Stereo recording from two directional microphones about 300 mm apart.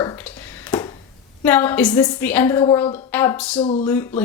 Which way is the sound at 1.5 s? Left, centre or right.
Centre.